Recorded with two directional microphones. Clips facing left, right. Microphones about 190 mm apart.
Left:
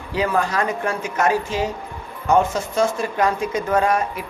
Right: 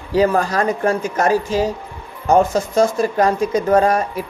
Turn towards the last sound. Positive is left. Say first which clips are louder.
# right 5 dB
turn(degrees=-40)  # may be behind; listen again after turning